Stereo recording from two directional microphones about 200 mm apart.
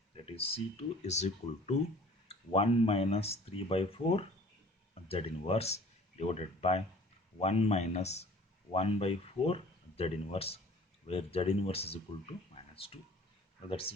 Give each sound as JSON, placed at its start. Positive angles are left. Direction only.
{"t": 0.3, "sound": "speech", "side_deg": 30}
{"t": 12.5, "sound": "a sound", "side_deg": 30}
{"t": 13.7, "sound": "speech", "side_deg": 25}